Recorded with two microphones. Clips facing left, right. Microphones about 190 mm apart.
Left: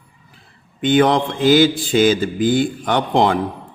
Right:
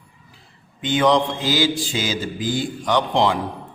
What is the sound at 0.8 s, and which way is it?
A man's voice, 55° left (ahead or behind).